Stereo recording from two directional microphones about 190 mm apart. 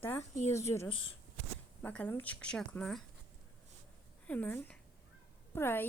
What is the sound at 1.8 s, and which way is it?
Speech, 10° left (ahead or behind).